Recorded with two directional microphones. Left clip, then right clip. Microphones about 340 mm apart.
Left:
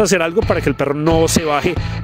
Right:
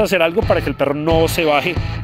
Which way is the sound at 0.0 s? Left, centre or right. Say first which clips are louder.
Even; left.